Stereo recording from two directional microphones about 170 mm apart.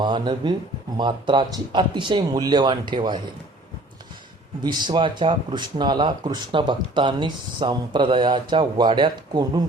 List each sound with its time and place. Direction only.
0.0 s speech: 25° right (ahead or behind)
4.6 s speech: 25° right (ahead or behind)